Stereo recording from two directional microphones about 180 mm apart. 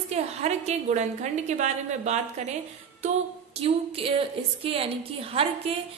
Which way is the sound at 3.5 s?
30° right (ahead or behind).